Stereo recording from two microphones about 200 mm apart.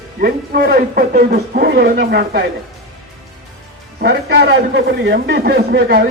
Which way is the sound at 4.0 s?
55° right (ahead or behind).